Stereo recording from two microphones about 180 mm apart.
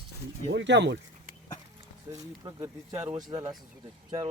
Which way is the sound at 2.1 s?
15° right (ahead or behind).